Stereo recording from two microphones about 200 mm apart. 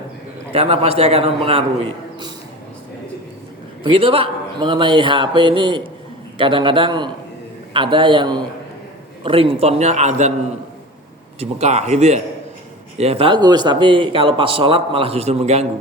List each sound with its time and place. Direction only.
0.5 s speech: 30° right (ahead or behind)
3.8 s a man's voice: 25° right (ahead or behind)
11.3 s a man's voice: 35° right (ahead or behind)